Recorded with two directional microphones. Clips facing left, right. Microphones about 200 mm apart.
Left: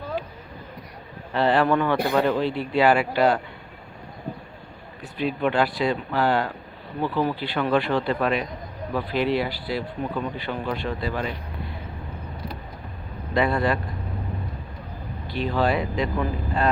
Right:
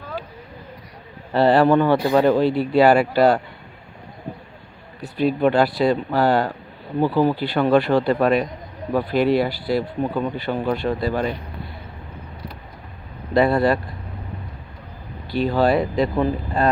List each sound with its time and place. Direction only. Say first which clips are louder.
1.3 s a man's voice: right 5 dB; 35° right (ahead or behind)
5.0 s speech: right 6 dB; 40° right (ahead or behind)
13.3 s speech: right 5 dB; 35° right (ahead or behind)
15.3 s speech: right 5 dB; 40° right (ahead or behind)